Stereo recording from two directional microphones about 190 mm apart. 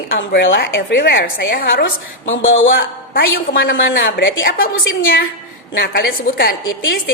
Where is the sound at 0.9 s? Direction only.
60° left (ahead or behind).